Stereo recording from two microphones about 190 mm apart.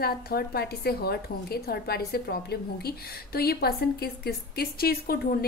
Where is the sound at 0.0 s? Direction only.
55° left (ahead or behind).